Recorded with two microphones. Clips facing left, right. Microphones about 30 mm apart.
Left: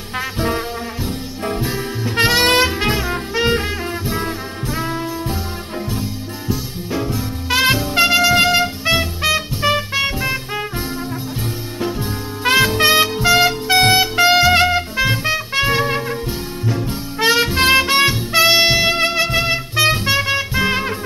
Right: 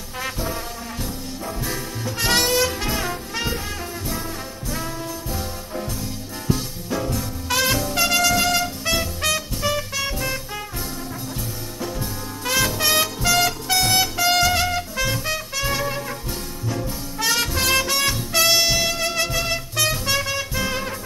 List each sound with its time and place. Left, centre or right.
1.0 s music: left
4.2 s brass instrument: left
6.9 s music: left
11.8 s music: left